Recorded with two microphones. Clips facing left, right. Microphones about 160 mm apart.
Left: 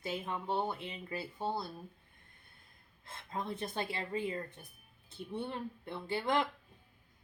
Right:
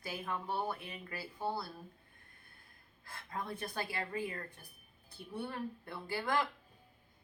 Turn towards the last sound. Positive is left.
turn(degrees=20)  # may be behind; listen again after turning